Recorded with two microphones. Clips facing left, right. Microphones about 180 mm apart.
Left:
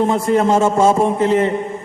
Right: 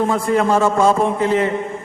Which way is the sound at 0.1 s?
20° left (ahead or behind).